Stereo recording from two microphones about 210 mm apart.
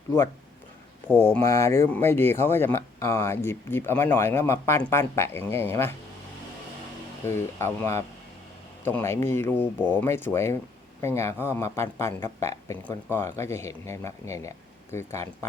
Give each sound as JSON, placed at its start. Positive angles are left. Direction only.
{"t": 1.0, "sound": "speech", "side_deg": 10}
{"t": 7.3, "sound": "speech", "side_deg": 10}